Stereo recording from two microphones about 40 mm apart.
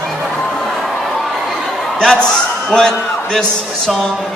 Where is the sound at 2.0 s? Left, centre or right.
Left.